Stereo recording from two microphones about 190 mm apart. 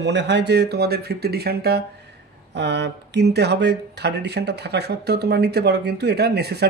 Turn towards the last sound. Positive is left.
turn(degrees=-60)  # may be behind; listen again after turning